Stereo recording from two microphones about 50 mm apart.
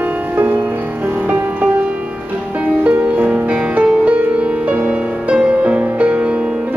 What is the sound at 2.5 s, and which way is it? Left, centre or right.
Music, right.